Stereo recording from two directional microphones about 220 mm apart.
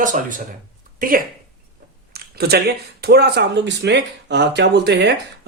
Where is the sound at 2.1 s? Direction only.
45° right (ahead or behind).